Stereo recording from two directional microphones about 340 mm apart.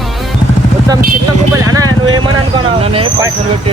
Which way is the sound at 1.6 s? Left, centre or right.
Centre.